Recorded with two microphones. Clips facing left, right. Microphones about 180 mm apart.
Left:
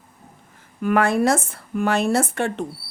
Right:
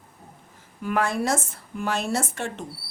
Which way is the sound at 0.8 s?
60° left (ahead or behind).